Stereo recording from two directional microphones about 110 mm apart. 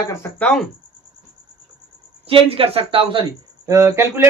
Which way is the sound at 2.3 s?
55° right (ahead or behind).